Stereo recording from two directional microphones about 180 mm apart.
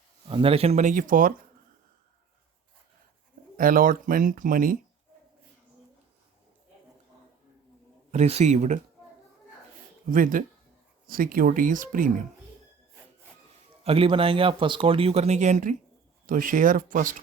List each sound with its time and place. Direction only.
0.3 s speech: 30° right (ahead or behind); by 1.3 s 50° right (ahead or behind)
3.6 s speech: 50° right (ahead or behind)
8.1 s speech: 40° right (ahead or behind)
10.1 s speech: 50° right (ahead or behind)
13.8 s speech: 30° right (ahead or behind); by 17.2 s 50° right (ahead or behind)